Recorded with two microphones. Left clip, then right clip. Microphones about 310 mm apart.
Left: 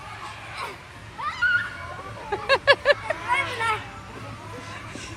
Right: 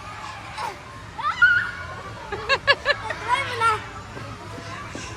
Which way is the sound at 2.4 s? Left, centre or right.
Centre.